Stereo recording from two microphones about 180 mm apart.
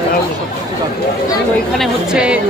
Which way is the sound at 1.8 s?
5° right (ahead or behind).